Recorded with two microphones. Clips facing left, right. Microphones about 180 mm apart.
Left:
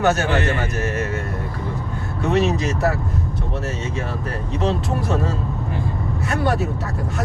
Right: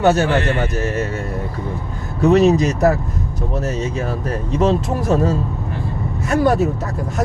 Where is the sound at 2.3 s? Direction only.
40° right (ahead or behind).